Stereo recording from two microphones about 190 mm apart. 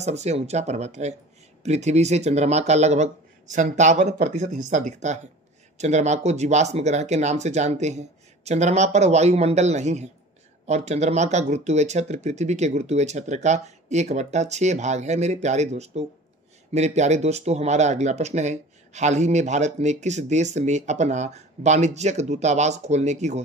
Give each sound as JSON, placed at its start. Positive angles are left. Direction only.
{"t": 0.0, "sound": "speech", "side_deg": -35}